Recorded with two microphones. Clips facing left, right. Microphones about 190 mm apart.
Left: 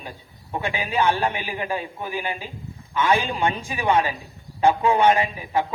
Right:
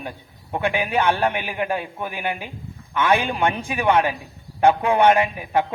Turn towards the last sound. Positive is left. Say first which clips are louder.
# right 2 dB
turn(degrees=-55)  # may be behind; listen again after turning